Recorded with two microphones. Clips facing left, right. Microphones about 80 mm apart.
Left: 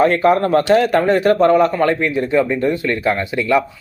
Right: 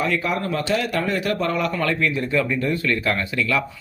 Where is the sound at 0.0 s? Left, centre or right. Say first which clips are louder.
Left 10 dB; left.